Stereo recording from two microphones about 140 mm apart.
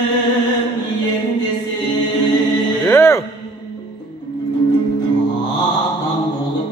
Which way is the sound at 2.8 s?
20° left (ahead or behind).